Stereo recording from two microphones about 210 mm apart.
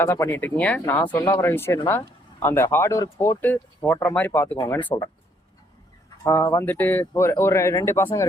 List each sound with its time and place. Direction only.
0.0 s speech: 10° left (ahead or behind)
6.2 s speech: 15° left (ahead or behind)